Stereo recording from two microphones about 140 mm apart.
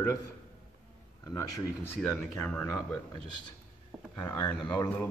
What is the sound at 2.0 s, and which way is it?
Speech, 5° left (ahead or behind).